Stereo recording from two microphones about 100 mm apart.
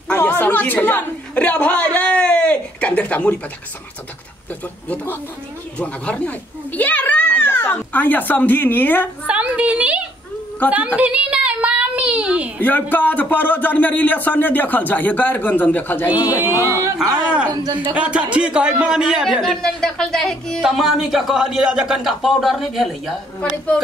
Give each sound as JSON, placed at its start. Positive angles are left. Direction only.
{"t": 0.1, "sound": "a man's voice", "side_deg": 15}
{"t": 2.0, "sound": "bleat", "side_deg": 10}
{"t": 4.8, "sound": "a child's voice", "side_deg": 15}
{"t": 9.2, "sound": "a woman's voice", "side_deg": -15}
{"t": 11.0, "sound": "a sound", "side_deg": -10}
{"t": 12.6, "sound": "speech", "side_deg": 15}
{"t": 16.1, "sound": "speech", "side_deg": 50}
{"t": 16.4, "sound": "speech", "side_deg": 30}
{"t": 17.9, "sound": "a man's voice", "side_deg": -10}